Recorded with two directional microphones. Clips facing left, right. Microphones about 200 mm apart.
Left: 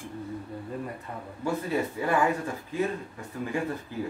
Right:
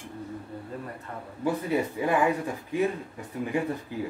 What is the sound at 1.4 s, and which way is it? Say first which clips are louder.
Speech: right 2 dB; 15° right (ahead or behind).